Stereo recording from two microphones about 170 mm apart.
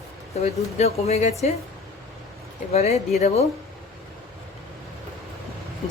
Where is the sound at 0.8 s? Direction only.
40° left (ahead or behind).